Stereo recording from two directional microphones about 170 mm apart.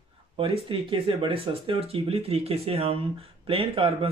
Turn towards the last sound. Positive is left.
turn(degrees=-30)  # may be behind; listen again after turning